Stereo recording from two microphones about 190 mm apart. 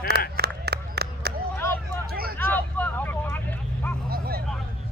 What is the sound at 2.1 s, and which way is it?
Hubbub, 50° right (ahead or behind).